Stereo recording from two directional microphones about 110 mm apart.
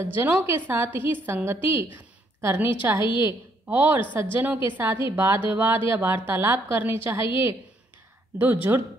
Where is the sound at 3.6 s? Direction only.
15° right (ahead or behind).